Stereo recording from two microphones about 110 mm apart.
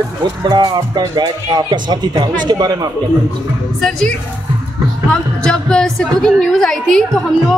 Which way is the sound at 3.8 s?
5° left (ahead or behind).